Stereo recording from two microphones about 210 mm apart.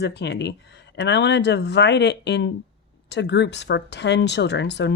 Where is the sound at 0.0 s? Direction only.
55° left (ahead or behind).